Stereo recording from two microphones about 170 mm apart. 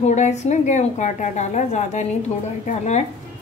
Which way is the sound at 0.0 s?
40° left (ahead or behind).